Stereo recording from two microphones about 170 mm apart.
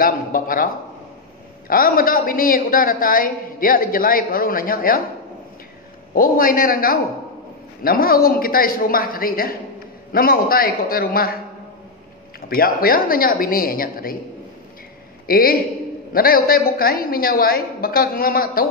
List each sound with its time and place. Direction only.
0.0 s a sound: 55° left (ahead or behind)
1.7 s a man's voice: 60° left (ahead or behind)
6.1 s a man's voice: 55° left (ahead or behind)
12.4 s a man's voice: 60° left (ahead or behind)
15.2 s a man's voice: 60° left (ahead or behind)